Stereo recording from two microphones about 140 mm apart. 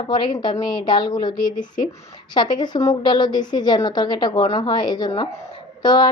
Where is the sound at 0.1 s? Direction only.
35° left (ahead or behind).